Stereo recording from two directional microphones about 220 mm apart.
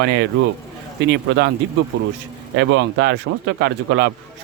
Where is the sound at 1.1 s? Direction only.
55° right (ahead or behind).